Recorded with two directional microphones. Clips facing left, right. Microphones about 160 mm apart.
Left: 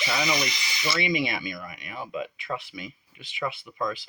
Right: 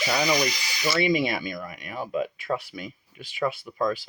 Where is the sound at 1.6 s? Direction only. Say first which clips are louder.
Right 4 dB; 40° right (ahead or behind).